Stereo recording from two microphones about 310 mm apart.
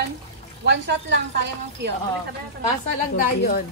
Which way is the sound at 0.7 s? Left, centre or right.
Right.